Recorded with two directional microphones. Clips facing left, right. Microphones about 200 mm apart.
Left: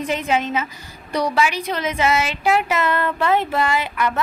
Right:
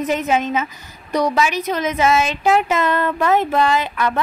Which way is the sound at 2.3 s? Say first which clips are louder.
Right 3 dB; 20° right (ahead or behind).